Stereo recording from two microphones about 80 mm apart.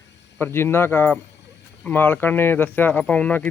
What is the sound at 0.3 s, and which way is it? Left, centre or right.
Speech, left.